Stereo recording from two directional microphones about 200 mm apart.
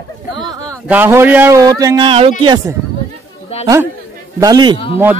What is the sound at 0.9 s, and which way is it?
A man's voice, 10° right (ahead or behind).